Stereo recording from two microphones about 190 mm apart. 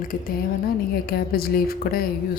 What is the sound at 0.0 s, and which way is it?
A woman's voice, 45° left (ahead or behind).